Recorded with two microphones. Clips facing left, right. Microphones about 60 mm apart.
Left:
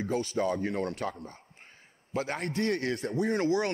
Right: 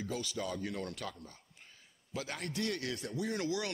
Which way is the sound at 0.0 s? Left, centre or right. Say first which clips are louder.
Left 9 dB; left.